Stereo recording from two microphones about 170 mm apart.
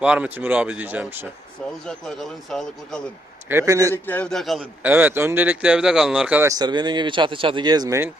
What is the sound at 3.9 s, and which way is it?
Speech, 10° left (ahead or behind).